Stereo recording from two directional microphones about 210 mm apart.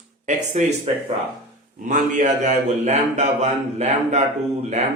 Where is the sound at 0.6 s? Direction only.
35° right (ahead or behind).